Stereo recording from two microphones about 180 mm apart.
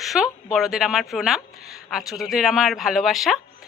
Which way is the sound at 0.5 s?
Centre (ahead or behind).